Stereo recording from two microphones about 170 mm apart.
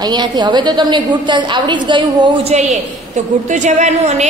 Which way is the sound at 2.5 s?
45° right (ahead or behind).